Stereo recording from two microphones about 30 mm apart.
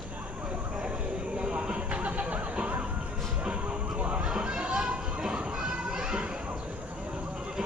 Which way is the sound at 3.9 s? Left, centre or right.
Right.